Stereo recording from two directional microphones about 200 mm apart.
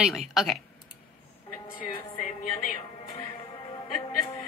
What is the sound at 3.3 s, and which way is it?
Music, 25° left (ahead or behind).